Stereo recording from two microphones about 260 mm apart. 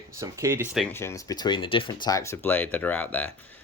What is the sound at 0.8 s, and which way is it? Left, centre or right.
Speech, centre.